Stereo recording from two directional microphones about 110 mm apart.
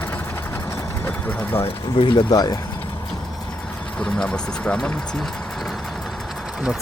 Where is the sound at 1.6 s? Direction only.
50° left (ahead or behind).